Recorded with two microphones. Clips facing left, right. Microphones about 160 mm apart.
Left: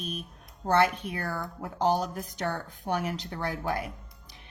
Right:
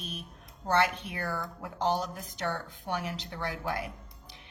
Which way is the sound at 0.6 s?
45° left (ahead or behind).